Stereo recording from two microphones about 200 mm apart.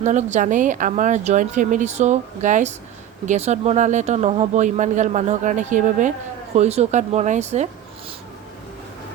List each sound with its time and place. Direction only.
0.0 s speech: 35° right (ahead or behind)